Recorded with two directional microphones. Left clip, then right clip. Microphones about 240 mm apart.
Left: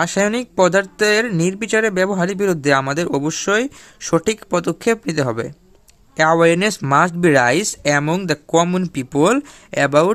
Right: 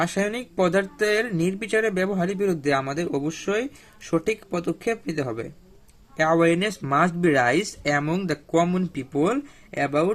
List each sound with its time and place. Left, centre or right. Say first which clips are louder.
0.0 s speech: left 7 dB; left